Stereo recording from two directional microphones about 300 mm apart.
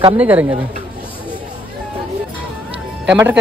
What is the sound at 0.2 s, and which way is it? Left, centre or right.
Speech, centre.